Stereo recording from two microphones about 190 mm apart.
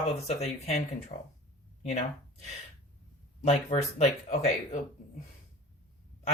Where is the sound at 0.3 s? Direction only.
35° left (ahead or behind).